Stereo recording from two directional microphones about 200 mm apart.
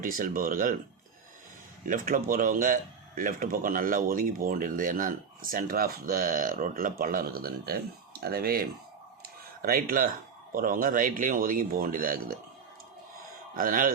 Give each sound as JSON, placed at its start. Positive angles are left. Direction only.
{"t": 0.0, "sound": "speech", "side_deg": -45}
{"t": 1.8, "sound": "speech", "side_deg": -40}
{"t": 9.2, "sound": "a sound", "side_deg": -50}
{"t": 10.5, "sound": "speech", "side_deg": -45}
{"t": 13.5, "sound": "a man's voice", "side_deg": -45}